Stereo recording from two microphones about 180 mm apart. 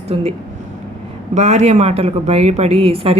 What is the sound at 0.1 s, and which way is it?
A woman's voice, 35° right (ahead or behind).